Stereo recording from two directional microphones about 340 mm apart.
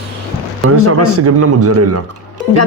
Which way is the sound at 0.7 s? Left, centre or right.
Right.